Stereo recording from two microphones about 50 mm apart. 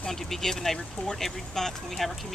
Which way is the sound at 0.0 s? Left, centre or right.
Centre.